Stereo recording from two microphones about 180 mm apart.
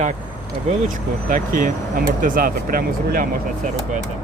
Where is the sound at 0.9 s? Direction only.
50° right (ahead or behind).